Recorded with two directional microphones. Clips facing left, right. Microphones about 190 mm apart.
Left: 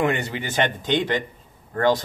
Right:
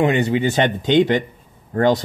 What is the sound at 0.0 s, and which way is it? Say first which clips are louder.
Speech: right 7 dB; 20° right (ahead or behind).